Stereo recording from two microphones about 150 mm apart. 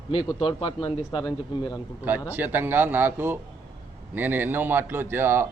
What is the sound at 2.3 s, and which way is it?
A man's voice, 15° right (ahead or behind).